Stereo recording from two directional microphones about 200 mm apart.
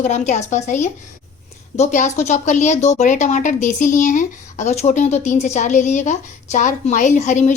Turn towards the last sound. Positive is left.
turn(degrees=35)  # may be behind; listen again after turning